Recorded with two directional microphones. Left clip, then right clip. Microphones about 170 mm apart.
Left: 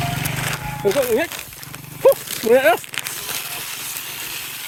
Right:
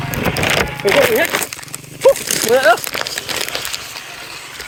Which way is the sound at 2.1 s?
45° left (ahead or behind).